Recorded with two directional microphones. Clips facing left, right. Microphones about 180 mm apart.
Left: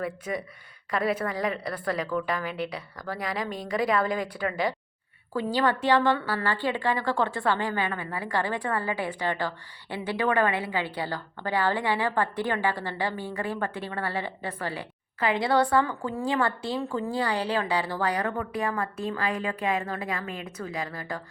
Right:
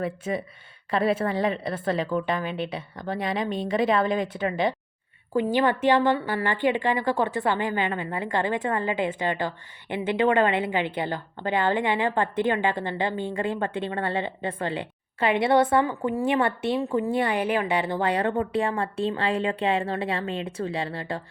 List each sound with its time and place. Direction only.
0.0 s a woman's voice: 25° right (ahead or behind)